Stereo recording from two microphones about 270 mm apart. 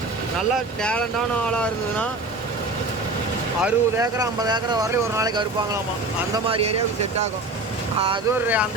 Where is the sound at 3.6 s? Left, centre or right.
Centre.